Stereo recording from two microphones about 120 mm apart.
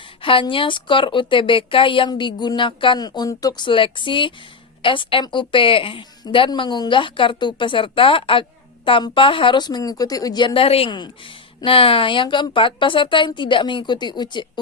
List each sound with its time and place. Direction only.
0.2 s speech: 45° left (ahead or behind)